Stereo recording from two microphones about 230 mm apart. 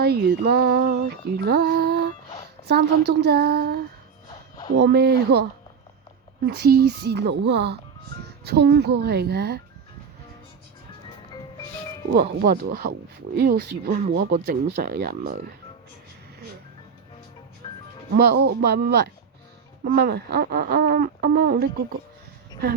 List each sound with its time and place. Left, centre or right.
0.0 s music: right
12.1 s music: right
14.1 s speech: right
17.6 s music: left
18.2 s music: right